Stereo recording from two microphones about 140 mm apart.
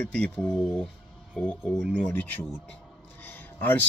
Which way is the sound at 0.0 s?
5° left (ahead or behind).